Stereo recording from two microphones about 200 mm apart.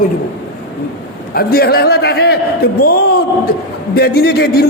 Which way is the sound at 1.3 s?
50° left (ahead or behind).